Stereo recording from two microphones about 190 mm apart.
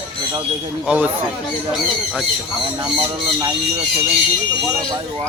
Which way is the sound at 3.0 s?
20° right (ahead or behind).